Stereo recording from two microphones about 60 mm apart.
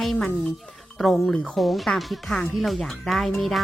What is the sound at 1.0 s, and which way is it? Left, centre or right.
Speech, centre.